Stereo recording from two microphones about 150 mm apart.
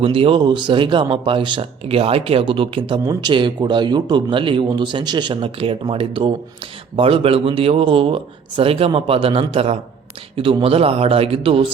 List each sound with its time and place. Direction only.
0.0 s speech: 35° right (ahead or behind)